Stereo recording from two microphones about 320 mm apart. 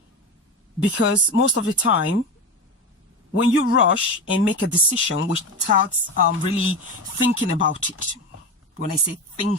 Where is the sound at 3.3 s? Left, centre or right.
Left.